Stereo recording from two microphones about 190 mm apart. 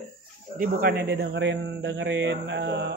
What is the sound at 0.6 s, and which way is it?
Speech, 55° right (ahead or behind).